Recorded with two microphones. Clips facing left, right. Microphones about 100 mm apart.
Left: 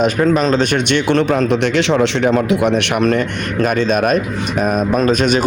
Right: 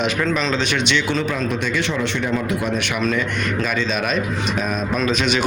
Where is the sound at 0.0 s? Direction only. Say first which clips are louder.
Left 7 dB; 45° left (ahead or behind).